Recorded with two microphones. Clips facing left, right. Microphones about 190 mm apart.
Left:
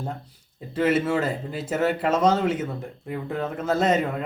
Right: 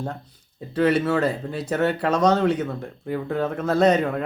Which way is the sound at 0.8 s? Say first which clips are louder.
Right 2 dB; 5° left (ahead or behind).